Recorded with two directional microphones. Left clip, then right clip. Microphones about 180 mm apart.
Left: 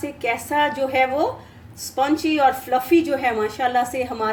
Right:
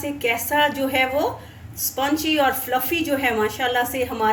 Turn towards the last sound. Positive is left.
turn(degrees=35)  # may be behind; listen again after turning